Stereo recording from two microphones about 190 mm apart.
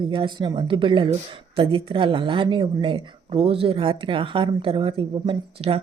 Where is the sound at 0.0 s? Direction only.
25° right (ahead or behind).